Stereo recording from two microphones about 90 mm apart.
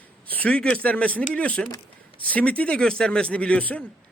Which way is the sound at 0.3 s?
15° left (ahead or behind).